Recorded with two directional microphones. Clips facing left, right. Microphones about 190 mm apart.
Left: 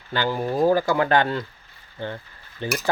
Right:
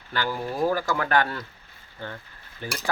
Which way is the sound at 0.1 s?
25° left (ahead or behind).